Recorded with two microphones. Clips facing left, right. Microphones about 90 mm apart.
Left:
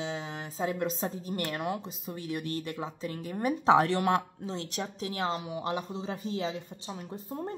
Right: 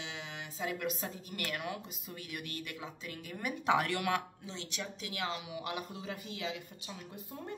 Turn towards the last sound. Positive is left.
turn(degrees=35)  # may be behind; listen again after turning